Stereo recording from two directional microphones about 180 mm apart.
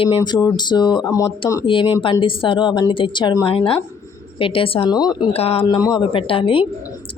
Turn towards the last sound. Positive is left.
turn(degrees=30)  # may be behind; listen again after turning